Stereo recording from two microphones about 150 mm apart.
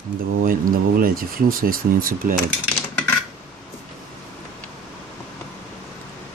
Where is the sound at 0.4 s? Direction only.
70° right (ahead or behind).